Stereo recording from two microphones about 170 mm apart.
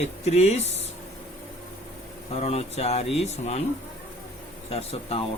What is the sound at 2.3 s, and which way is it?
Speech, 35° left (ahead or behind).